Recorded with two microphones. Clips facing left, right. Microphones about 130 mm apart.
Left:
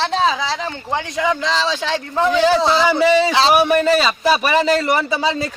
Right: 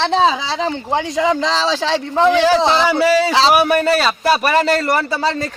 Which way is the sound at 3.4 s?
5° right (ahead or behind).